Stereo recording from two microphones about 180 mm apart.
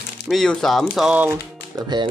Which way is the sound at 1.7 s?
25° right (ahead or behind).